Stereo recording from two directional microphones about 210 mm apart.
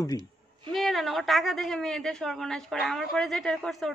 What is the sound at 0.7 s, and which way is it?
A man's voice, centre (ahead or behind).